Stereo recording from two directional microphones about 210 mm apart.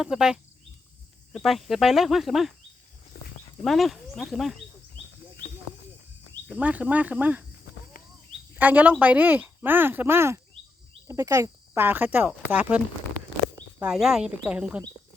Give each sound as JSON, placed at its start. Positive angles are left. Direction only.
{"t": 0.0, "sound": "speech", "side_deg": -5}
{"t": 3.1, "sound": "goat", "side_deg": 40}
{"t": 3.6, "sound": "speech", "side_deg": 0}
{"t": 6.5, "sound": "speech", "side_deg": -5}
{"t": 8.5, "sound": "speech", "side_deg": -10}
{"t": 13.8, "sound": "speech", "side_deg": -5}